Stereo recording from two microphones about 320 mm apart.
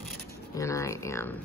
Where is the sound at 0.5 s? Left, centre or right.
Centre.